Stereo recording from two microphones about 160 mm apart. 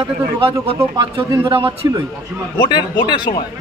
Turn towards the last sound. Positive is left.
turn(degrees=25)  # may be behind; listen again after turning